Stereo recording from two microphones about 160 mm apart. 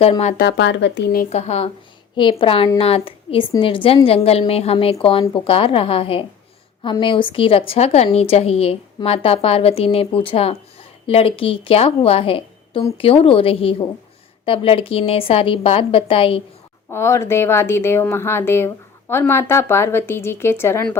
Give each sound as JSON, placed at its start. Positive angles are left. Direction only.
{"t": 0.0, "sound": "a woman's voice", "side_deg": 40}
{"t": 0.3, "sound": "speech", "side_deg": 90}
{"t": 1.3, "sound": "a woman's voice", "side_deg": 45}
{"t": 16.9, "sound": "a woman's voice", "side_deg": 15}